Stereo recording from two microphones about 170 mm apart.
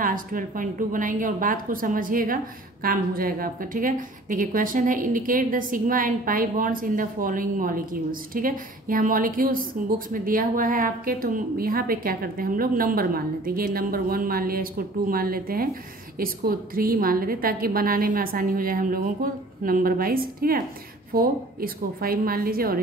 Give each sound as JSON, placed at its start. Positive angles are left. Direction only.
{"t": 0.0, "sound": "a woman's voice", "side_deg": -55}